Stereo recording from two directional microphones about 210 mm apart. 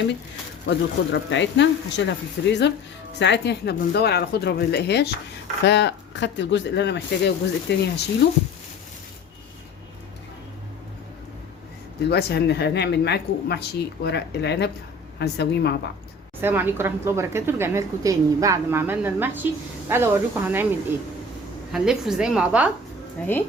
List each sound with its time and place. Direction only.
0.7 s a woman's voice: 55° left (ahead or behind)
12.0 s a woman's voice: 50° left (ahead or behind)
16.4 s a woman's voice: 10° right (ahead or behind)
21.7 s a woman's voice: centre (ahead or behind)
23.2 s speech: 10° left (ahead or behind)